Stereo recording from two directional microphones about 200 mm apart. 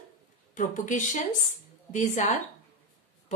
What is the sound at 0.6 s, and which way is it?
A woman's voice, 40° left (ahead or behind).